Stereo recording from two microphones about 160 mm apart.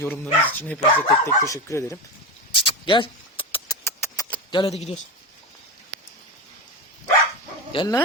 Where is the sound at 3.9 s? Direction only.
15° left (ahead or behind).